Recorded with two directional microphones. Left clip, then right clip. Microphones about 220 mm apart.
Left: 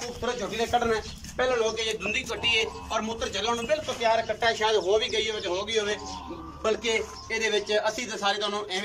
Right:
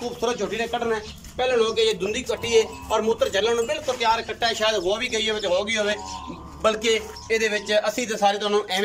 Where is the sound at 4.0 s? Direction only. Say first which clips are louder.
Right 3 dB; 50° right (ahead or behind).